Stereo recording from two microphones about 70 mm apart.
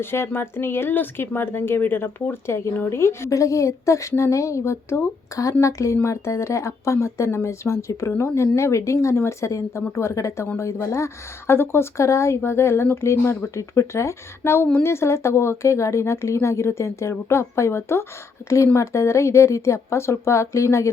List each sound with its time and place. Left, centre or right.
0.0 s speech: left
9.5 s speech: left